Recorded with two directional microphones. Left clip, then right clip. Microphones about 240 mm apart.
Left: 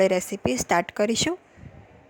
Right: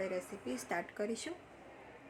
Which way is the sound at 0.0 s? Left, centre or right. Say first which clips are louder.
Left 18 dB; left.